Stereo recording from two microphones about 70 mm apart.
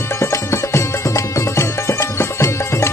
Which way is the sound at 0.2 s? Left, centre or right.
Left.